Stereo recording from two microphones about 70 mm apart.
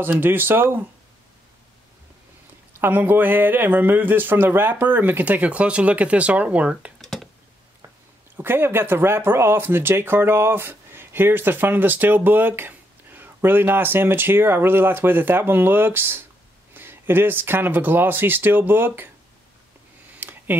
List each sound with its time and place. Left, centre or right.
0.0 s speech: right
2.8 s a man's voice: right
7.0 s computer keyboard: centre
8.4 s speech: right
20.2 s a sound: right